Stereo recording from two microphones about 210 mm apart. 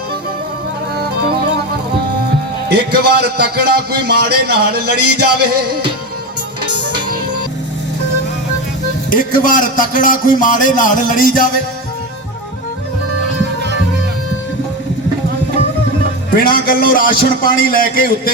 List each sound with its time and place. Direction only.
2.7 s a man's voice: 50° right (ahead or behind)
4.9 s music: 90° right
9.0 s a man's voice: 40° left (ahead or behind)
16.4 s a man's voice: 45° left (ahead or behind)